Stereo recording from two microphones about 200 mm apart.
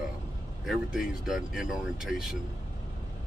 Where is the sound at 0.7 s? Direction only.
Centre (ahead or behind).